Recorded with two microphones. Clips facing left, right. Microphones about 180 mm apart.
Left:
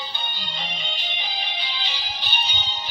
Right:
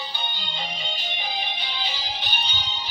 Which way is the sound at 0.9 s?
45° right (ahead or behind).